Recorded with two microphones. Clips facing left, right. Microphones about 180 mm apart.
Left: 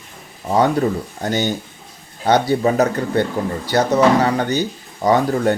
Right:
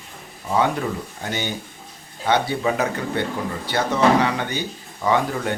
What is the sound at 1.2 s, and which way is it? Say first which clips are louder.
Speech: left 8 dB; 40° left (ahead or behind).